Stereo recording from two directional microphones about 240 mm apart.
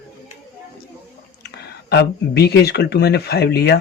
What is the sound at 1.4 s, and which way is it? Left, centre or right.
A man's voice, left.